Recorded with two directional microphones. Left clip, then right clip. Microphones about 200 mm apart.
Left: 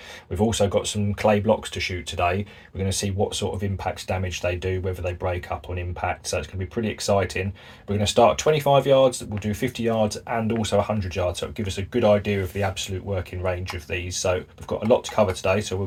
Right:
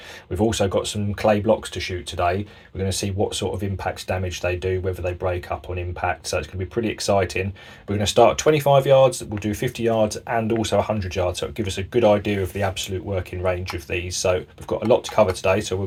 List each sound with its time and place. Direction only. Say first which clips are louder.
0.3 s speech: right 1 dB; 20° right (ahead or behind)